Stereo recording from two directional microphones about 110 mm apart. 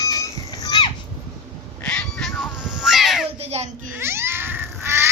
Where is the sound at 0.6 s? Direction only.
40° left (ahead or behind).